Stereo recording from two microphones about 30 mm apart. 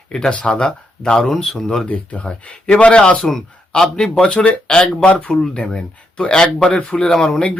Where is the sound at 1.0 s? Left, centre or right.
Centre.